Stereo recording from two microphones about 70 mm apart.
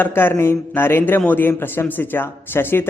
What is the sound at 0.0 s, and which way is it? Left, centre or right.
Speech, left.